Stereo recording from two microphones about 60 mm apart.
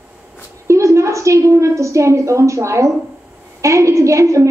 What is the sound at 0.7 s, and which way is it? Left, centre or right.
A woman's voice, right.